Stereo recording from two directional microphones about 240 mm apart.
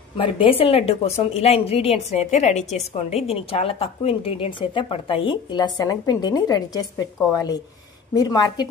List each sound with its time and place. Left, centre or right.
0.2 s a woman's voice: left